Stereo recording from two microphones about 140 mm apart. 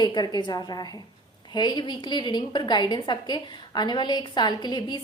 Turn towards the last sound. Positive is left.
turn(degrees=30)  # may be behind; listen again after turning